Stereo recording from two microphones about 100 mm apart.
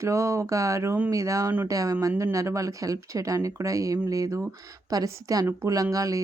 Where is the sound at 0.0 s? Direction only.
30° right (ahead or behind).